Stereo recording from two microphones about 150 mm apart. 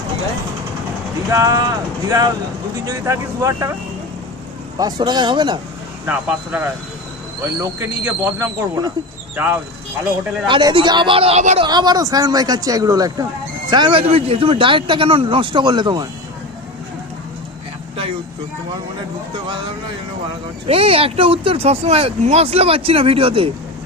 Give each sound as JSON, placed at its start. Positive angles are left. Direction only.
{"t": 1.3, "sound": "speech", "side_deg": -20}
{"t": 4.8, "sound": "speech", "side_deg": -25}
{"t": 6.1, "sound": "speech", "side_deg": -15}
{"t": 10.4, "sound": "speech", "side_deg": -30}
{"t": 11.6, "sound": "speech", "side_deg": -30}
{"t": 14.0, "sound": "speech", "side_deg": -40}
{"t": 20.7, "sound": "speech", "side_deg": -40}